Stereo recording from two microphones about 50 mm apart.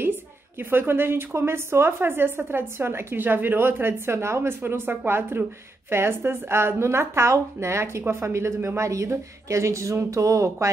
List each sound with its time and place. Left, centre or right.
0.6 s a woman's voice: right